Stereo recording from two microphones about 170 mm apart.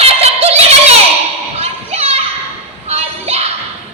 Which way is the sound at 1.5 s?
35° right (ahead or behind).